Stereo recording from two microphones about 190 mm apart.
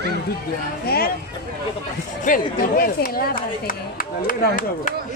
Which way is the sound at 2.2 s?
45° left (ahead or behind).